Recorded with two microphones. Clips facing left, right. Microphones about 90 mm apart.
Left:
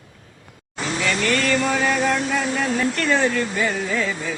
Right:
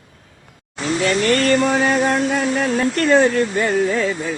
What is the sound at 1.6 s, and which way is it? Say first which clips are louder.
Music: right 4 dB; 35° right (ahead or behind).